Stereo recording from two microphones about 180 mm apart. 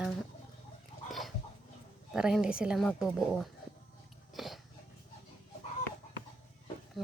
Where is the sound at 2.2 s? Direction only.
5° right (ahead or behind).